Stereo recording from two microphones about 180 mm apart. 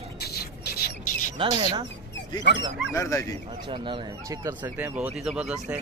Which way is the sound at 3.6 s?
25° right (ahead or behind).